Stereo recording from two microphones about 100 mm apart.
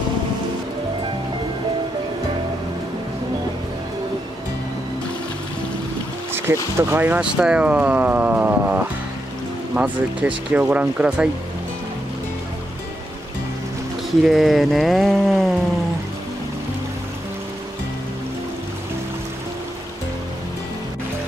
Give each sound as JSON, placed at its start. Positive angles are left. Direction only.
{"t": 6.3, "sound": "speech", "side_deg": -25}
{"t": 7.2, "sound": "speech", "side_deg": -10}
{"t": 14.2, "sound": "a sound", "side_deg": 0}